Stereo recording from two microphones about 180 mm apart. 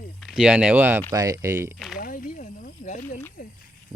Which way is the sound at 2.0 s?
50° left (ahead or behind).